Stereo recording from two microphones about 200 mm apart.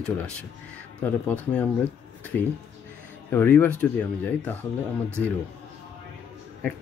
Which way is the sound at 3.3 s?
10° left (ahead or behind).